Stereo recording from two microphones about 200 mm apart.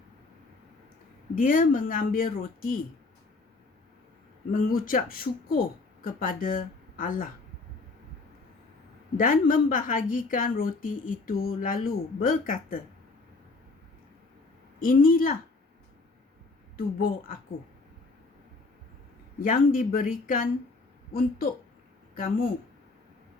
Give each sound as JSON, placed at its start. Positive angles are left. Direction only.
{"t": 1.4, "sound": "a woman's voice", "side_deg": 45}
{"t": 4.5, "sound": "a woman's voice", "side_deg": 45}
{"t": 9.1, "sound": "a woman's voice", "side_deg": 45}
{"t": 14.8, "sound": "a woman's voice", "side_deg": 45}
{"t": 16.7, "sound": "a woman's voice", "side_deg": 45}
{"t": 19.4, "sound": "a woman's voice", "side_deg": 40}